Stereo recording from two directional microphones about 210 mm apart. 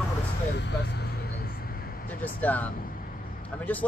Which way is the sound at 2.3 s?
5° left (ahead or behind).